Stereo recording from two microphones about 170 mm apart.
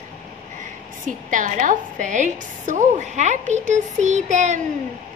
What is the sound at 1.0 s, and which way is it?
A woman's voice, 50° right (ahead or behind).